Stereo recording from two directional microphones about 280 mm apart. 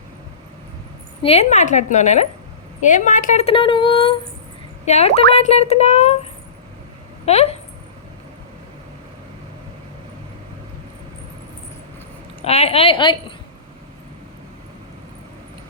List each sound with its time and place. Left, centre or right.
1.2 s speech: left
7.3 s speech: left
12.4 s speech: left